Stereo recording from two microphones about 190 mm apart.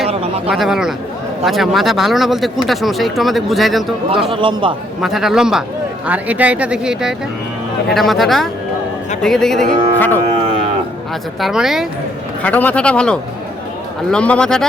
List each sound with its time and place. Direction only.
0.1 s a sound: 35° right (ahead or behind)
0.5 s speech: centre (ahead or behind)
4.3 s a man's voice: 25° right (ahead or behind)
4.9 s speech: centre (ahead or behind)
11.3 s speech: centre (ahead or behind)